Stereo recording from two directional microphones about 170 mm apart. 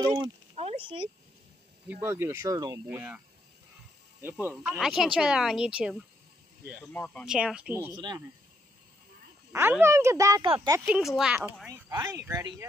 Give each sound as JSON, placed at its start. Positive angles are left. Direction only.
{"t": 0.0, "sound": "speech", "side_deg": -25}
{"t": 0.6, "sound": "a sound", "side_deg": -35}
{"t": 1.9, "sound": "speech", "side_deg": -15}
{"t": 4.2, "sound": "speech", "side_deg": -15}
{"t": 4.6, "sound": "speech", "side_deg": 0}
{"t": 6.9, "sound": "speech", "side_deg": 10}
{"t": 7.2, "sound": "speech", "side_deg": -5}
{"t": 7.9, "sound": "speech", "side_deg": -25}
{"t": 9.5, "sound": "speech", "side_deg": -15}
{"t": 10.9, "sound": "speech", "side_deg": -5}
{"t": 11.7, "sound": "speech", "side_deg": -20}